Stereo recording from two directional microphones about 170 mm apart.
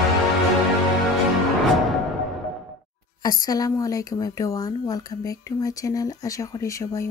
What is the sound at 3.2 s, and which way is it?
Speech, 20° left (ahead or behind).